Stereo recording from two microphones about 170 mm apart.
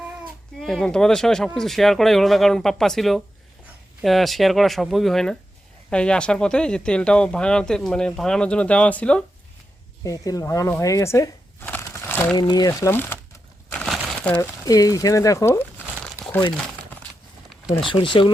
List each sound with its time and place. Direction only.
0.6 s speech: centre (ahead or behind)
10.0 s speech: 20° left (ahead or behind)
12.4 s speech: 25° left (ahead or behind)
13.7 s crumpling: 5° left (ahead or behind)
17.8 s speech: 30° left (ahead or behind)